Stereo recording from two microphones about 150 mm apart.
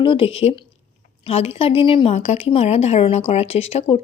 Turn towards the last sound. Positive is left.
turn(degrees=45)  # may be behind; listen again after turning